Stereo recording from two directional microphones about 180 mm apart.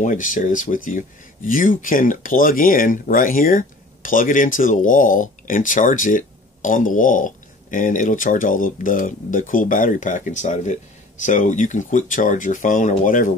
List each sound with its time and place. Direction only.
0.0 s speech: 45° left (ahead or behind)